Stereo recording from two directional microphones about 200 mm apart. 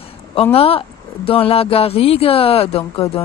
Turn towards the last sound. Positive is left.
turn(degrees=30)  # may be behind; listen again after turning